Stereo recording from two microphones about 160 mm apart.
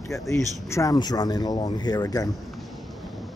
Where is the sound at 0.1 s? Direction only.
20° left (ahead or behind).